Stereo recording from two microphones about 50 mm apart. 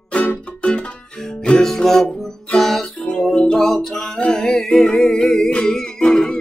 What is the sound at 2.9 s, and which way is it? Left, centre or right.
Music, centre.